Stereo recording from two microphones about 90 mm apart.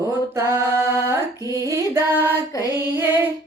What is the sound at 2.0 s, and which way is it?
Music, 25° right (ahead or behind).